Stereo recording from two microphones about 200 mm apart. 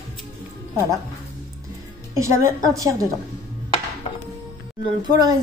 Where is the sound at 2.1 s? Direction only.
15° right (ahead or behind).